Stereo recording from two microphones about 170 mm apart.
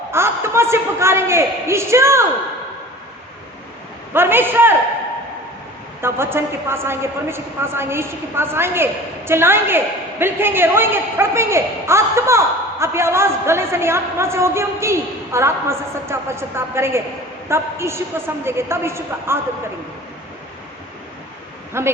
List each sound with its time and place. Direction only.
0.1 s a woman's voice: 15° right (ahead or behind)
4.1 s a woman's voice: 15° right (ahead or behind)
6.0 s a woman's voice: 15° right (ahead or behind)
21.7 s speech: 15° right (ahead or behind)